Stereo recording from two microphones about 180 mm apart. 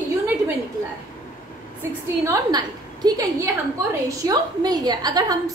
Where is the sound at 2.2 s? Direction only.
20° right (ahead or behind).